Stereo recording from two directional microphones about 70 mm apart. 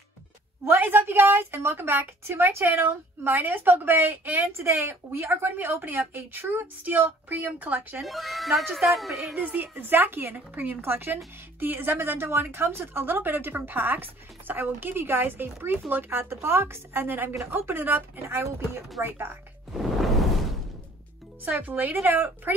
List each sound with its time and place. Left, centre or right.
0.9 s a woman's voice: right
8.0 s speech: centre
9.3 s a woman's voice: right
19.7 s music: centre
21.5 s speech: right